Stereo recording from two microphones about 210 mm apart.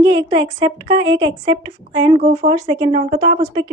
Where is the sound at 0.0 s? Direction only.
20° right (ahead or behind).